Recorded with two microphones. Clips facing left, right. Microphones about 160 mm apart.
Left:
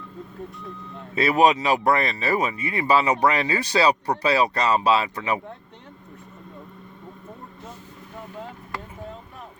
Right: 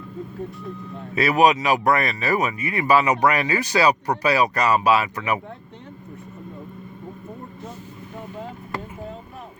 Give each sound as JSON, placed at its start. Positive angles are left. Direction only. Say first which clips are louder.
{"t": 1.1, "sound": "speech", "louder": "right 1 dB", "side_deg": 25}